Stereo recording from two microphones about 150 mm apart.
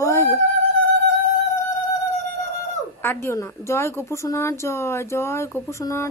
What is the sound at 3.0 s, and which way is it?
A woman's voice, 15° left (ahead or behind).